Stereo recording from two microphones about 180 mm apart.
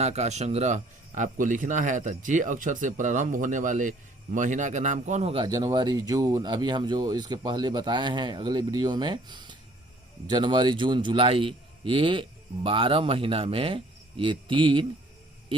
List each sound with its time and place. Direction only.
0.0 s speech: 35° right (ahead or behind)
5.5 s speech: 20° right (ahead or behind)